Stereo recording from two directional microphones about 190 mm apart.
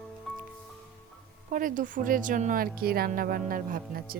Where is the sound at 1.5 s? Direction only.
45° right (ahead or behind).